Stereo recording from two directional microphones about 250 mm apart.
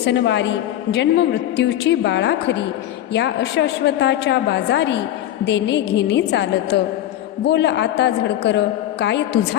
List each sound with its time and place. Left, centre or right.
0.0 s a man's voice: left